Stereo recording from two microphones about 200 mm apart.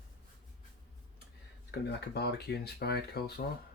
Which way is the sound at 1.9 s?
55° left (ahead or behind).